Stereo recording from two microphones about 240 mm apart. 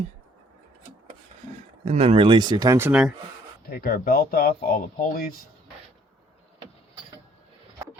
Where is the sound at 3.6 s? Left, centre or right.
Left.